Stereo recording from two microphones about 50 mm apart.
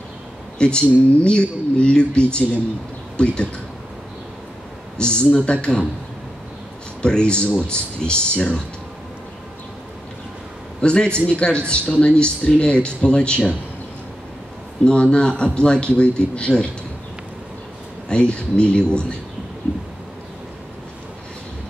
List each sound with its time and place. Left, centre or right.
0.6 s speech: centre
4.9 s speech: centre
7.0 s speech: centre
10.8 s a man's voice: centre
14.9 s speech: left
18.0 s speech: left